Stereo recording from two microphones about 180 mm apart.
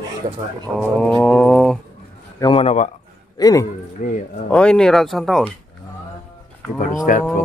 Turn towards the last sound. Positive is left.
turn(degrees=45)  # may be behind; listen again after turning